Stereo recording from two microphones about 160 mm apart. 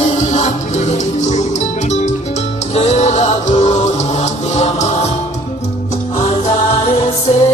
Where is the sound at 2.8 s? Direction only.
45° left (ahead or behind).